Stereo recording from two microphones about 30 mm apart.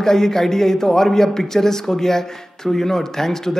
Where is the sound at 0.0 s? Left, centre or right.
Centre.